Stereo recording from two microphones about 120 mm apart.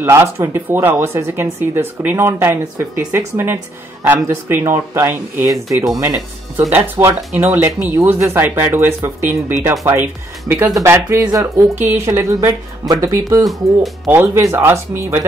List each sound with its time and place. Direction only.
0.0 s speech: 20° right (ahead or behind)